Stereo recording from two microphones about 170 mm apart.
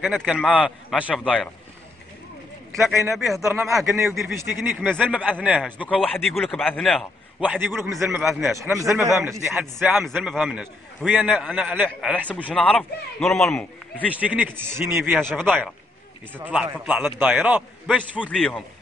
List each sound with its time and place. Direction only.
0.0 s a man's voice: centre (ahead or behind)
3.1 s a man's voice: centre (ahead or behind)
3.8 s a man's voice: 15° right (ahead or behind)
4.1 s a man's voice: centre (ahead or behind)
8.5 s a man's voice: 15° right (ahead or behind)
9.5 s a man's voice: centre (ahead or behind)
12.2 s a man's voice: 10° left (ahead or behind)
14.2 s a man's voice: 10° right (ahead or behind)
15.0 s a man's voice: centre (ahead or behind)
18.3 s a man's voice: 5° left (ahead or behind)